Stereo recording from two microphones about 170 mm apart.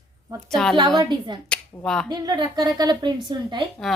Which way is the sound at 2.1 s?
25° right (ahead or behind).